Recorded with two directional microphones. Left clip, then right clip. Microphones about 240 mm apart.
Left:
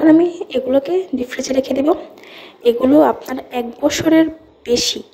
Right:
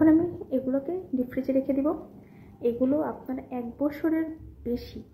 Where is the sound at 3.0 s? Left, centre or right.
Left.